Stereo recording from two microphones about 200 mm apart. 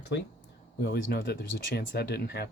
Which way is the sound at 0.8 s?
60° left (ahead or behind).